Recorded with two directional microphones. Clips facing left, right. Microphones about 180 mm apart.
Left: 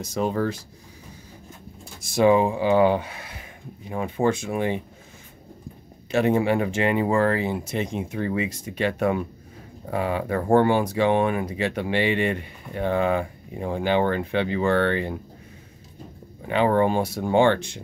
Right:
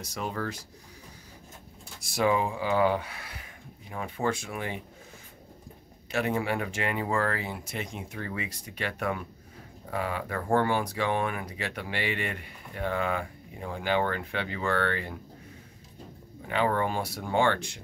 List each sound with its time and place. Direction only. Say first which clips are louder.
0.0 s speech: left 9 dB; 25° left (ahead or behind)
2.0 s speech: left 8 dB; 25° left (ahead or behind)
6.1 s speech: left 8 dB; 25° left (ahead or behind)
16.4 s speech: left 7 dB; 25° left (ahead or behind)